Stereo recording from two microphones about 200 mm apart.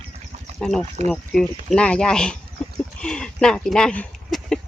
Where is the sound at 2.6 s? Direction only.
5° left (ahead or behind).